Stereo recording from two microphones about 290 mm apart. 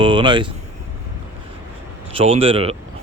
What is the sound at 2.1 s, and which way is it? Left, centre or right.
Speech, centre.